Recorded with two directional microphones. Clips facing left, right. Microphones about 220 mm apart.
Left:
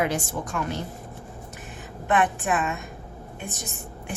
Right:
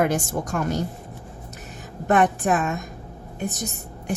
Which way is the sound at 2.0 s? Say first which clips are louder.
Right 4 dB; 40° right (ahead or behind).